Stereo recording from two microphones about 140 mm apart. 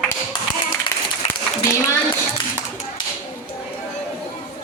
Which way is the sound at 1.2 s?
55° left (ahead or behind).